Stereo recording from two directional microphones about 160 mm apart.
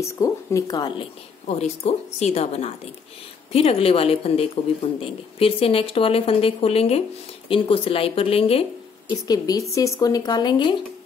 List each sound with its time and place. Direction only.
0.0 s speech: 20° left (ahead or behind)
1.6 s speech: 40° left (ahead or behind)
9.1 s speech: 20° left (ahead or behind)